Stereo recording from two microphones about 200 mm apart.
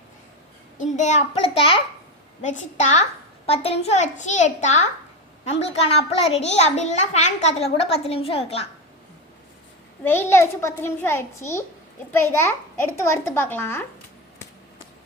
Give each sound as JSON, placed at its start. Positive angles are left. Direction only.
{"t": 0.8, "sound": "a child's voice", "side_deg": 35}
{"t": 10.0, "sound": "a child's voice", "side_deg": 10}